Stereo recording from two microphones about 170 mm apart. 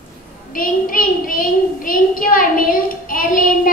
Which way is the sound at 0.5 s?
55° left (ahead or behind).